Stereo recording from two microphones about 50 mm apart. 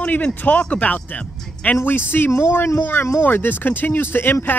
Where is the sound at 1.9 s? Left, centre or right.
Left.